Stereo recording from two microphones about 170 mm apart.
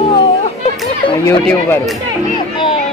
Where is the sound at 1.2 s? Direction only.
15° left (ahead or behind).